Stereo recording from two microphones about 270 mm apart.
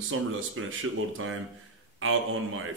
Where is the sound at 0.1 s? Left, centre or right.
Right.